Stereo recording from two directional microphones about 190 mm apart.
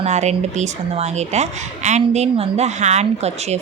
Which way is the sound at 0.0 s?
35° right (ahead or behind).